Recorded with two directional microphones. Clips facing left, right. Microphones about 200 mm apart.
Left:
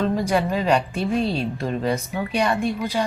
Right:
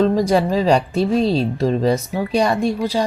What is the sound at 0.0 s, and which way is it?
A woman's voice, 35° right (ahead or behind).